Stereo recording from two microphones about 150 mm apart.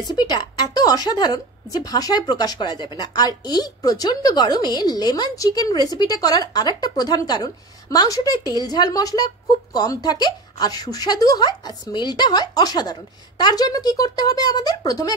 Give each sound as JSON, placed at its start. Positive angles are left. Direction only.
{"t": 0.1, "sound": "a woman's voice", "side_deg": 30}